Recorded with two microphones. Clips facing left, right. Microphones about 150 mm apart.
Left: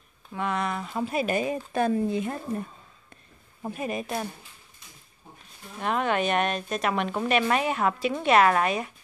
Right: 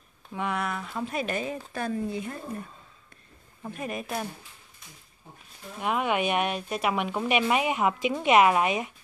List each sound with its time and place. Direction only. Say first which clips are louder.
0.3 s speech: left 2 dB; 10° right (ahead or behind)
0.7 s speech: left 3 dB; 20° left (ahead or behind)
1.0 s a woman's voice: left 5 dB; 5° left (ahead or behind)
1.7 s speech: left 8 dB; 20° left (ahead or behind)
3.7 s speech: left 2 dB; centre (ahead or behind)
5.8 s speech: left 1 dB; 10° right (ahead or behind)